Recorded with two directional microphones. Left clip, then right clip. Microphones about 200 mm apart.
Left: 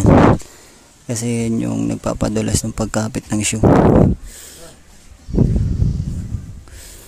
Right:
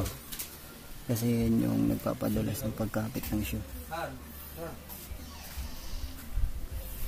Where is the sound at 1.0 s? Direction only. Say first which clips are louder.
Left 9 dB; 25° left (ahead or behind); by 3.5 s 45° left (ahead or behind).